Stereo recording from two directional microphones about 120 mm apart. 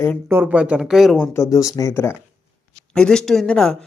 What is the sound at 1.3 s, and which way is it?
Speech, 25° left (ahead or behind).